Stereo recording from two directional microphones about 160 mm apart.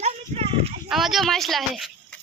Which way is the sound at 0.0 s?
40° right (ahead or behind).